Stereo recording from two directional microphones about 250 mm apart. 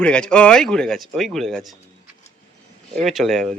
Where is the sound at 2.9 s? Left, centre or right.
Centre.